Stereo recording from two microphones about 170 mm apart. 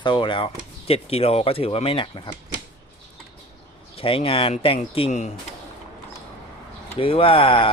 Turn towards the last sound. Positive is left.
turn(degrees=30)  # may be behind; listen again after turning